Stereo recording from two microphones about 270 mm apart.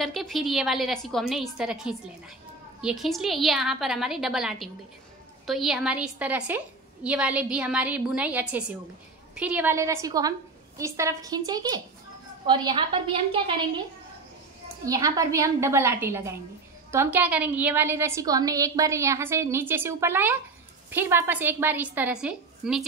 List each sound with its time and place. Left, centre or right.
0.0 s a woman's voice: centre
14.9 s a woman's voice: centre